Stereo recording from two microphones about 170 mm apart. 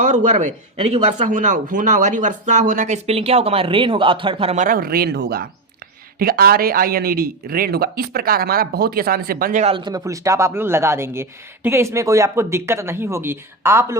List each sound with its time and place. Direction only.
0.0 s a man's voice: 45° right (ahead or behind)
4.5 s speech: 50° right (ahead or behind); by 5.5 s 70° right (ahead or behind)
6.1 s speech: 60° right (ahead or behind)
9.7 s speech: 25° right (ahead or behind)